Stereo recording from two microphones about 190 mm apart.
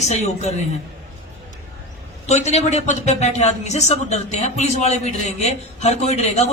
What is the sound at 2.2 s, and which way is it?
A man's voice, 35° left (ahead or behind).